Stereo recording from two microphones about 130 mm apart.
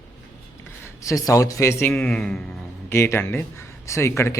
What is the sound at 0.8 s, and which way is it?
Speech, 25° left (ahead or behind).